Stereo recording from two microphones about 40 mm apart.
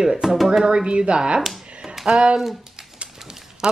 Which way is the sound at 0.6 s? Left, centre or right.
Right.